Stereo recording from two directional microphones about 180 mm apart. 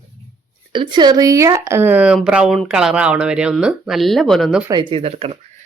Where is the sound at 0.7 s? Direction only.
25° right (ahead or behind); by 4.6 s centre (ahead or behind).